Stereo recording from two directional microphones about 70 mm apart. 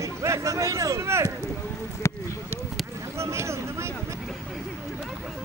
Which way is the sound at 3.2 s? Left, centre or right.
Right.